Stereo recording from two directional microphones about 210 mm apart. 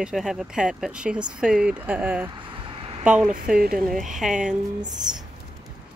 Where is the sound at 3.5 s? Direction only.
45° right (ahead or behind).